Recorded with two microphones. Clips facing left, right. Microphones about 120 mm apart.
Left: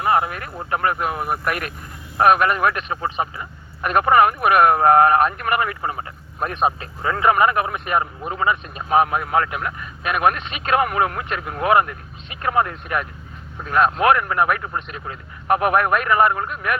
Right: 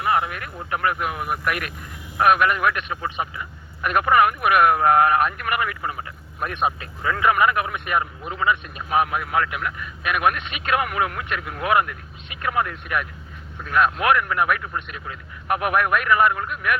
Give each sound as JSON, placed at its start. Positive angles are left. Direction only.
{"t": 0.0, "sound": "a man's voice", "side_deg": 30}